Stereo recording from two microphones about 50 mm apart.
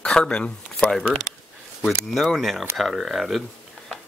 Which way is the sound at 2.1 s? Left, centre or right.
Centre.